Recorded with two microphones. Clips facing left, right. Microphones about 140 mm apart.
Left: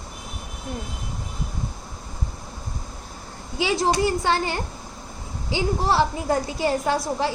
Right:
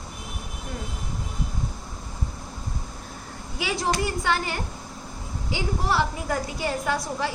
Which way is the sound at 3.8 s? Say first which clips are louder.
Left 3 dB; 30° left (ahead or behind).